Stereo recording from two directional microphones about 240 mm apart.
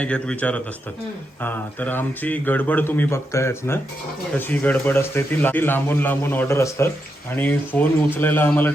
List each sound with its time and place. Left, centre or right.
0.0 s a man's voice: centre